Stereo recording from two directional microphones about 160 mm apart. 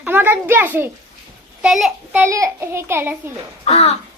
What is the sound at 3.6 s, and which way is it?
Speech, 45° left (ahead or behind).